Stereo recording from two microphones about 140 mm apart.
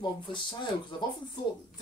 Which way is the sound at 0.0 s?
35° left (ahead or behind).